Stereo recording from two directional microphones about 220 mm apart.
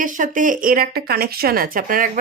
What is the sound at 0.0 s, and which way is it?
Speech, 35° right (ahead or behind).